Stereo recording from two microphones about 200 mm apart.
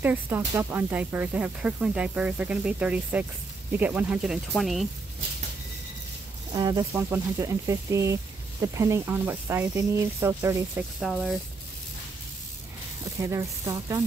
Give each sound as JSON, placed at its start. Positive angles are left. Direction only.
{"t": 0.0, "sound": "speech", "side_deg": -10}
{"t": 6.5, "sound": "speech", "side_deg": -20}
{"t": 11.0, "sound": "speech", "side_deg": 0}
{"t": 13.2, "sound": "speech", "side_deg": -15}